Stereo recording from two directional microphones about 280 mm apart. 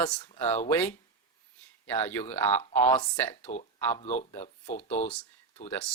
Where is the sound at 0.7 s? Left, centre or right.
Centre.